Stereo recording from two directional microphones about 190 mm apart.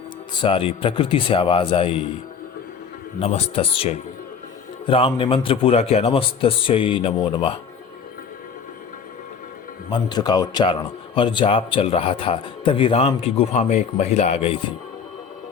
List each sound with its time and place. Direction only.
0.4 s a man's voice: 30° left (ahead or behind)
3.2 s a man's voice: 30° left (ahead or behind)
10.1 s a man's voice: 20° left (ahead or behind)